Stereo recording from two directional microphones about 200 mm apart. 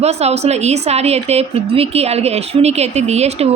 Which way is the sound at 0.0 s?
30° right (ahead or behind).